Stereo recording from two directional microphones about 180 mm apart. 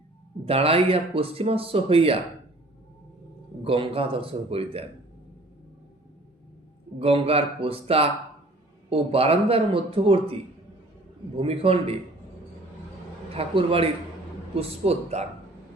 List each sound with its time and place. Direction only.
0.4 s speech: 35° right (ahead or behind)
3.6 s speech: 30° right (ahead or behind)
7.0 s speech: 30° right (ahead or behind)
11.3 s speech: 30° right (ahead or behind)
13.3 s speech: 30° right (ahead or behind)